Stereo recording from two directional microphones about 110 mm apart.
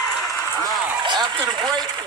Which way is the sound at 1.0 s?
45° right (ahead or behind).